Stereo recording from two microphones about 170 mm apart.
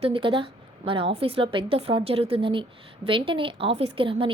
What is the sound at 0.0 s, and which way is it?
A woman's voice, 30° right (ahead or behind).